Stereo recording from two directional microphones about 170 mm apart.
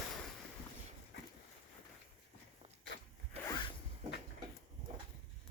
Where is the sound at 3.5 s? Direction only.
30° left (ahead or behind).